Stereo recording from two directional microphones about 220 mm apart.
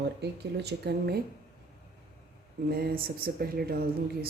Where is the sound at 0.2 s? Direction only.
50° right (ahead or behind).